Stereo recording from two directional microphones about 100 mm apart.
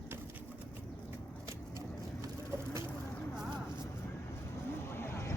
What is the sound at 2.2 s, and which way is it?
Bird, 30° right (ahead or behind).